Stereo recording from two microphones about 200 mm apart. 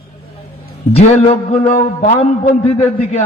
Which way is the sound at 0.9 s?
30° left (ahead or behind).